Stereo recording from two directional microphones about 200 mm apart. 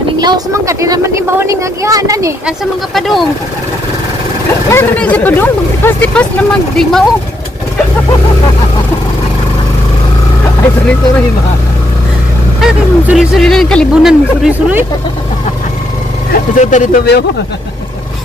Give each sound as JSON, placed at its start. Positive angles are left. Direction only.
{"t": 0.2, "sound": "a woman's voice", "side_deg": -20}
{"t": 2.4, "sound": "speech", "side_deg": 0}
{"t": 4.6, "sound": "speech", "side_deg": 10}
{"t": 12.5, "sound": "speech", "side_deg": -5}
{"t": 16.3, "sound": "speech", "side_deg": 40}